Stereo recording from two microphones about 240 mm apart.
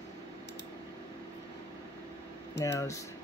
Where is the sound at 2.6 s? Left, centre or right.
Left.